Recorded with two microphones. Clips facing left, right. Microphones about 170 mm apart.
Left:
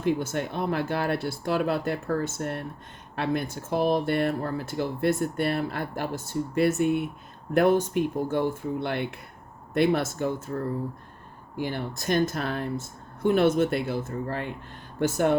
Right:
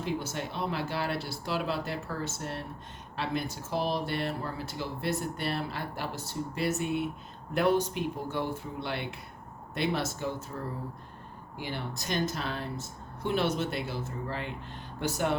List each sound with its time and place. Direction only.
0.0 s speech: 55° left (ahead or behind)